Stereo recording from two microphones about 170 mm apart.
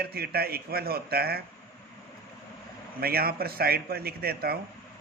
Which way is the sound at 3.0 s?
65° right (ahead or behind).